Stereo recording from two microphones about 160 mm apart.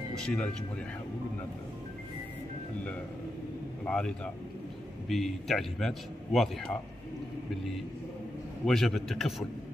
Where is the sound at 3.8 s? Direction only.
5° left (ahead or behind).